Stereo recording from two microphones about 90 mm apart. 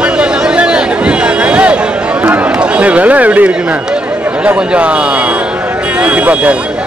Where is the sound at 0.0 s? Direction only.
10° right (ahead or behind).